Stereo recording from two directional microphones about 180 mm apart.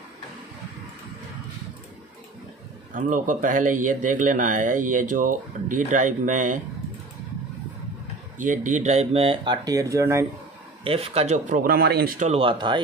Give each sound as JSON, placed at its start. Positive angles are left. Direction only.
{"t": 2.9, "sound": "speech", "side_deg": -45}
{"t": 8.4, "sound": "speech", "side_deg": -45}
{"t": 10.8, "sound": "speech", "side_deg": -30}
{"t": 12.2, "sound": "speech", "side_deg": -35}